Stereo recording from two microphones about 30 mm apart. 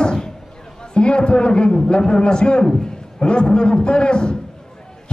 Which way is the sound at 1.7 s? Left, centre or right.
Left.